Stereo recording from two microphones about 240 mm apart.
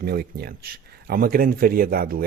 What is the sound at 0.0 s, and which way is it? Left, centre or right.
Speech, right.